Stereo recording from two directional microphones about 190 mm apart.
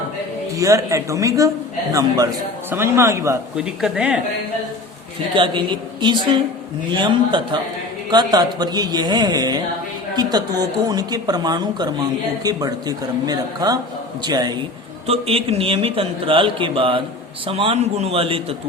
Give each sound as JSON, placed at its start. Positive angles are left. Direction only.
{"t": 0.5, "sound": "a man's voice", "side_deg": -15}
{"t": 5.3, "sound": "a man's voice", "side_deg": -25}